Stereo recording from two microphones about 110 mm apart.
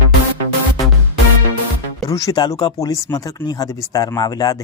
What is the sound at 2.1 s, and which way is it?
Speech, 30° left (ahead or behind).